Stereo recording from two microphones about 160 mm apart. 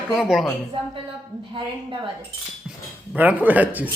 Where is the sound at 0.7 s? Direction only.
35° right (ahead or behind).